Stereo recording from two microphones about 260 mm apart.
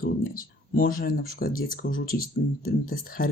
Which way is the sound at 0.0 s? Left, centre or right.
Left.